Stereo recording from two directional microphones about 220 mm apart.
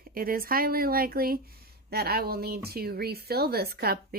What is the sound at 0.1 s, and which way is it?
Speech, 40° right (ahead or behind).